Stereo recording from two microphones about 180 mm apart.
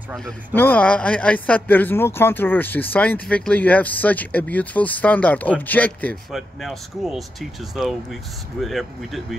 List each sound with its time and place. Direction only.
0.6 s a man's voice: 10° left (ahead or behind)